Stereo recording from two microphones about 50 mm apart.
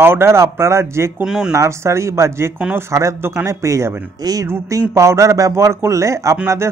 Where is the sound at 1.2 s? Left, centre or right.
Centre.